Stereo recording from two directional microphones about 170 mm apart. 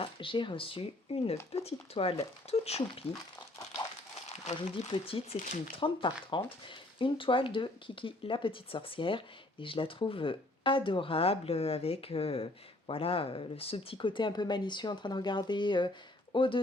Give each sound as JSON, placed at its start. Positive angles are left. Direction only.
{"t": 0.0, "sound": "speech", "side_deg": 30}
{"t": 4.3, "sound": "speech", "side_deg": 35}